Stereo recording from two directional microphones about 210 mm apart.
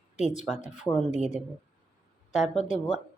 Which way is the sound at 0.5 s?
35° left (ahead or behind).